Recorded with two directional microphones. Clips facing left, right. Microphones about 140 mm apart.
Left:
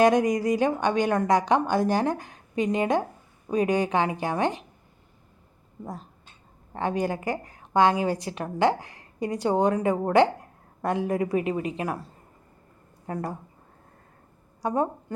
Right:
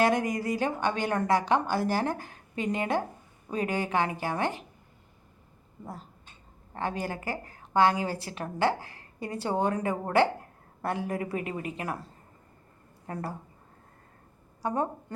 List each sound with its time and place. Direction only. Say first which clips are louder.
0.0 s a woman's voice: left 6 dB; 20° left (ahead or behind)
6.7 s a woman's voice: left 6 dB; 20° left (ahead or behind)
14.6 s a woman's voice: left 4 dB; 15° left (ahead or behind)